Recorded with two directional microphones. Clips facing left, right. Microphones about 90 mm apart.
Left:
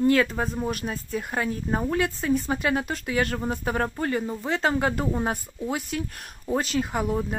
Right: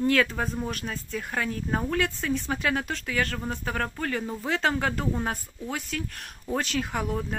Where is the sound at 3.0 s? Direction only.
20° left (ahead or behind).